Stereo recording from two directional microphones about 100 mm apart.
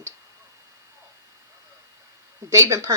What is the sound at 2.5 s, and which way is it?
Speech, 30° right (ahead or behind).